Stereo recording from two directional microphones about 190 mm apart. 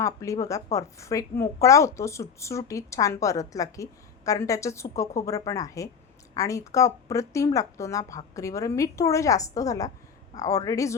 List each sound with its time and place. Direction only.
0.0 s a woman's voice: 15° left (ahead or behind)